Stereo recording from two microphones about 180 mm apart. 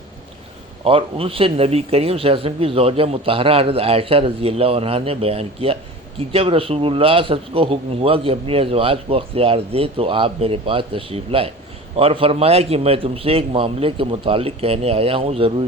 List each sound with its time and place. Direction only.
0.9 s a man's voice: 30° right (ahead or behind)